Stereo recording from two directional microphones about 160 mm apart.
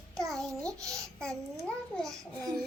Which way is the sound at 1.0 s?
5° left (ahead or behind).